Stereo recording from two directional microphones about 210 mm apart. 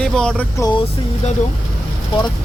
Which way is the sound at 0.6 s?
15° left (ahead or behind).